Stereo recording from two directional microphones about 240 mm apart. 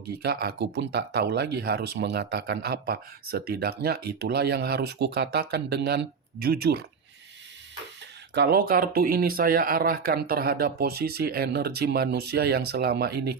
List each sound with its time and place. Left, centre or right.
0.2 s speech: right
8.4 s speech: right